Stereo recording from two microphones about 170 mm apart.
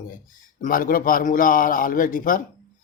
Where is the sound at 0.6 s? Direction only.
55° left (ahead or behind).